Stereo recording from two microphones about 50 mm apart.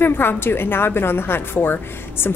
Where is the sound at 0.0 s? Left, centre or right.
Left.